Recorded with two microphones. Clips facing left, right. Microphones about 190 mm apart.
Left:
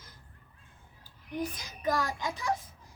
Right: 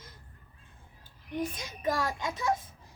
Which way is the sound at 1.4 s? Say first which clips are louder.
Right 1 dB; 25° right (ahead or behind).